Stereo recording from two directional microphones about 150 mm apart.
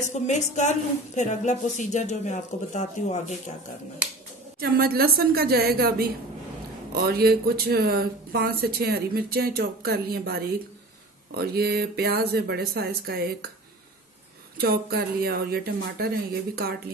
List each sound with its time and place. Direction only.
0.0 s speech: 50° left (ahead or behind)
4.6 s speech: 90° right
14.6 s speech: 90° right